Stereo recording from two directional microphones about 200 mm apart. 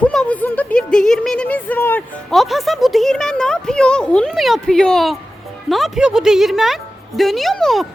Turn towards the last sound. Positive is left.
turn(degrees=0)  # may be behind; listen again after turning